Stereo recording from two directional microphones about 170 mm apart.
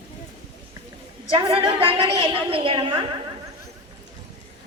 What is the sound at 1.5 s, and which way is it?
Speech, 30° right (ahead or behind).